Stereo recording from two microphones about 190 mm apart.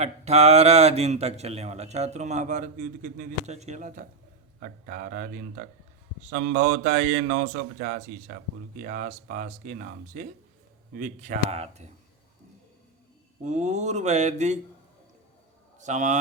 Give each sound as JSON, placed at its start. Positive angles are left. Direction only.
{"t": 0.0, "sound": "a man's voice", "side_deg": -35}
{"t": 13.4, "sound": "speech", "side_deg": -40}
{"t": 15.8, "sound": "speech", "side_deg": -40}